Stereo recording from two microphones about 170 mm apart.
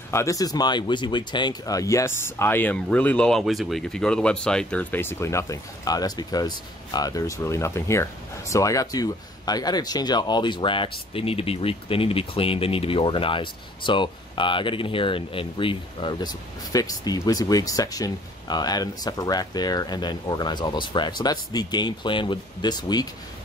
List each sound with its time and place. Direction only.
0.1 s speech: 20° left (ahead or behind)